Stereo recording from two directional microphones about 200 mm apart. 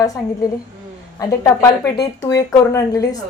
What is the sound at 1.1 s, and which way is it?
Speech, 15° left (ahead or behind).